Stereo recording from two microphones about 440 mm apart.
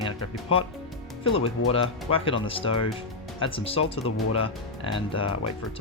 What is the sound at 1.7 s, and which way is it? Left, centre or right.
Speech, centre.